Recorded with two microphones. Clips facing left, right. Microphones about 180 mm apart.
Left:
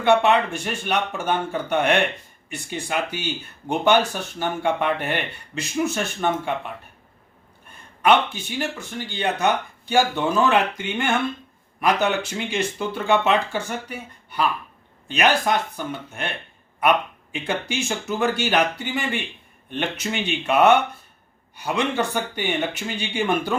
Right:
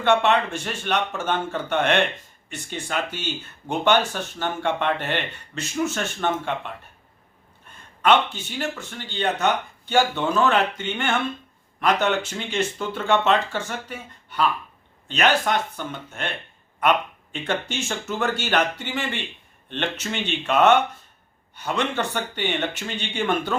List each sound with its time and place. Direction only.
0.0 s speech: 10° left (ahead or behind)
8.0 s speech: 10° left (ahead or behind)
17.3 s speech: 10° left (ahead or behind)